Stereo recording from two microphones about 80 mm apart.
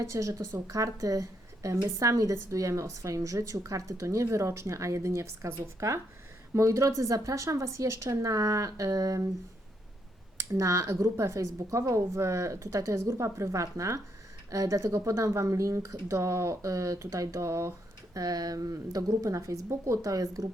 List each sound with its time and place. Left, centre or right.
0.0 s a woman's voice: right
10.3 s a woman's voice: right
18.1 s a woman's voice: right